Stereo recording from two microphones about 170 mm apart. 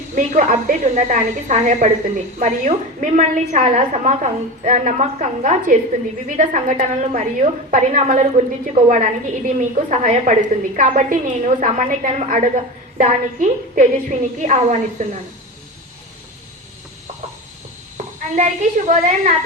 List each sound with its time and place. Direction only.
0.2 s a woman's voice: 40° right (ahead or behind)
17.9 s speech: 45° right (ahead or behind)